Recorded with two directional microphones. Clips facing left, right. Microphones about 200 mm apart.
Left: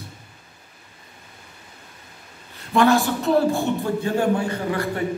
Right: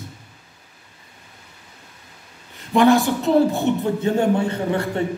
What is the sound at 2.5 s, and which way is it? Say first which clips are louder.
A man's voice: right 3 dB; 15° right (ahead or behind).